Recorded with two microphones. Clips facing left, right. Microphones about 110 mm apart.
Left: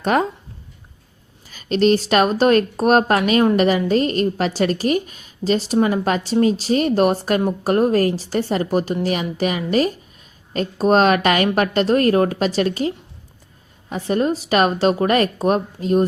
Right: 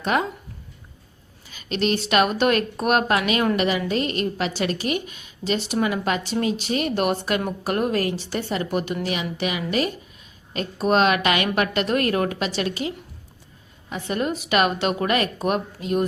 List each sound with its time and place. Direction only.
0.0 s speech: 40° left (ahead or behind)
1.5 s a woman's voice: 40° left (ahead or behind)
13.9 s a woman's voice: 35° left (ahead or behind)